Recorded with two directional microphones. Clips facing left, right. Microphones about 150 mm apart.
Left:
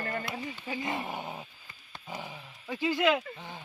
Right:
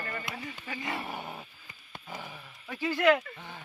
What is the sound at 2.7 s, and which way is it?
Speech, 15° left (ahead or behind).